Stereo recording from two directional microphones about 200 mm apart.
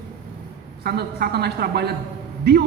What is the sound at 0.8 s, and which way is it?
A man's voice, 50° right (ahead or behind).